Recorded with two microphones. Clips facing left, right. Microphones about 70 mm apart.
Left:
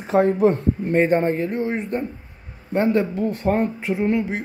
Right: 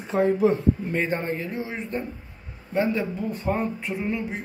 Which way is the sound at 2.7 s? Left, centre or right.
Left.